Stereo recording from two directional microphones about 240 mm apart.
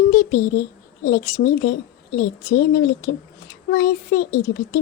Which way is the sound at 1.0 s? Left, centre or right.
Left.